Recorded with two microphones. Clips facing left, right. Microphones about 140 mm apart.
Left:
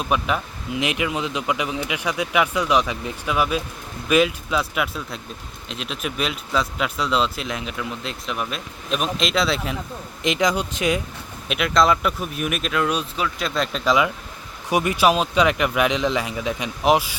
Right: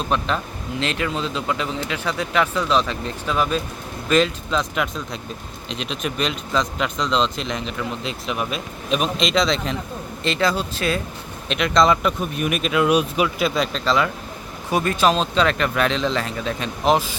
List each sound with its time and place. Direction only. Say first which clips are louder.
0.0 s speech: even; 10° left (ahead or behind)
10.2 s speech: even; 15° left (ahead or behind)
11.4 s speech: right 1 dB; 5° left (ahead or behind); by 13.5 s 15° right (ahead or behind)
13.5 s speech: right 2 dB; centre (ahead or behind)
13.8 s speech: left 1 dB; 10° left (ahead or behind)